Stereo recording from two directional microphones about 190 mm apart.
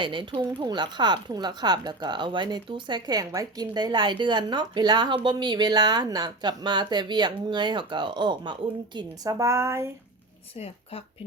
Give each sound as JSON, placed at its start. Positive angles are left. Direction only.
{"t": 0.0, "sound": "a woman's voice", "side_deg": -25}